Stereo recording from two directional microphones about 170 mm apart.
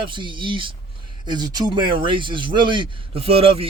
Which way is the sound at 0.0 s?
30° right (ahead or behind).